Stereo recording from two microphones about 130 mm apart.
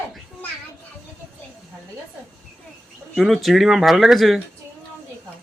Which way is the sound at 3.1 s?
Centre (ahead or behind).